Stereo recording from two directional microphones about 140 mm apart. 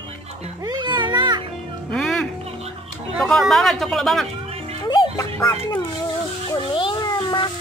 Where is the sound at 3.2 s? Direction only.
Centre (ahead or behind).